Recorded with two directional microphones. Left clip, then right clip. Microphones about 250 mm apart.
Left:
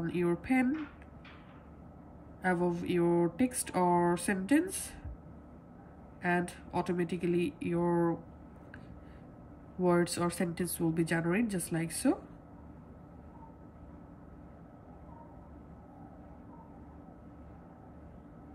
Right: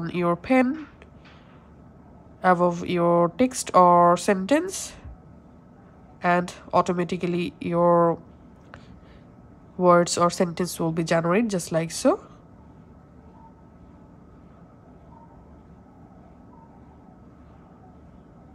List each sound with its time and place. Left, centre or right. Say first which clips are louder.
0.0 s speech: right 8 dB; centre
2.4 s speech: right 12 dB; centre
6.2 s speech: right 10 dB; centre
9.8 s speech: right 12 dB; centre